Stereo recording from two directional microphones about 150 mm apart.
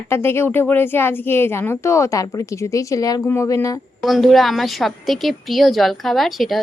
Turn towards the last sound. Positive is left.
turn(degrees=0)  # may be behind; listen again after turning